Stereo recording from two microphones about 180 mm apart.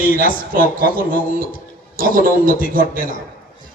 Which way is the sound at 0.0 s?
50° left (ahead or behind).